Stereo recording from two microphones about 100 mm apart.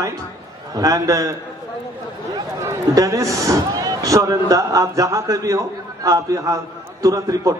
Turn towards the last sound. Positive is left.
turn(degrees=-35)  # may be behind; listen again after turning